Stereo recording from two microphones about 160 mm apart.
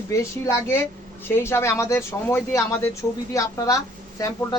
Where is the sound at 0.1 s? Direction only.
20° left (ahead or behind).